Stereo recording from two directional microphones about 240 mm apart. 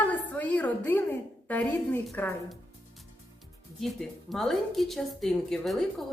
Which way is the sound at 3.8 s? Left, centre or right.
Centre.